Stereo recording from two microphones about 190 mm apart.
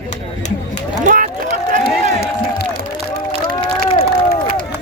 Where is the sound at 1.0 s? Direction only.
45° right (ahead or behind).